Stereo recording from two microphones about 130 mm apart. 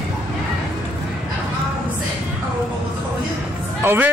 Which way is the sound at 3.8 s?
15° right (ahead or behind).